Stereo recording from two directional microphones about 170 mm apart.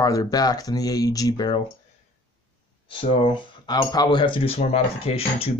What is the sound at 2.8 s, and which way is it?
Speech, 30° left (ahead or behind).